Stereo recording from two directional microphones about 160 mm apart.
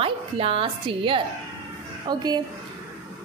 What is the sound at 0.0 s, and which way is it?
A woman's voice, 35° right (ahead or behind).